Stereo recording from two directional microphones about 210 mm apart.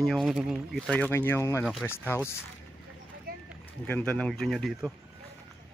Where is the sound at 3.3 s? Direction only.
45° right (ahead or behind).